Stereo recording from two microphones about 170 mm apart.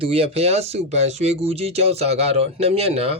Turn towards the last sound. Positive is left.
turn(degrees=-35)  # may be behind; listen again after turning